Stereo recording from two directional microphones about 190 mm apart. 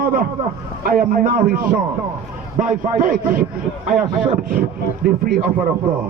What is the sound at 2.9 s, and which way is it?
Speech, 45° right (ahead or behind).